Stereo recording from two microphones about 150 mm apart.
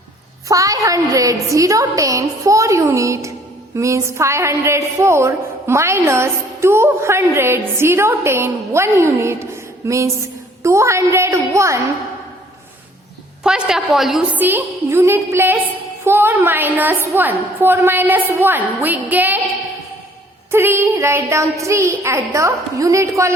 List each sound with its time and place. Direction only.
0.4 s a woman's voice: 20° right (ahead or behind)
13.4 s a woman's voice: 5° right (ahead or behind)
20.5 s a woman's voice: 15° right (ahead or behind)